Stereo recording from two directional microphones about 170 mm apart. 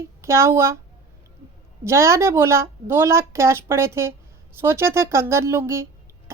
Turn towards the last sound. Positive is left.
turn(degrees=-15)  # may be behind; listen again after turning